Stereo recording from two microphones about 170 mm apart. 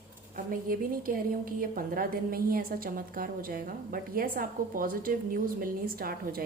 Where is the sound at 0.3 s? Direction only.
60° right (ahead or behind).